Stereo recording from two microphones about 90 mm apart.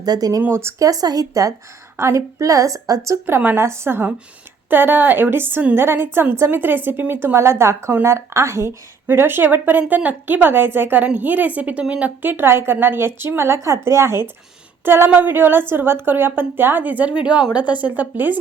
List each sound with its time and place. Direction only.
0.0 s speech: 45° right (ahead or behind)
0.4 s a woman's voice: 30° right (ahead or behind)
3.2 s a woman's voice: 25° right (ahead or behind)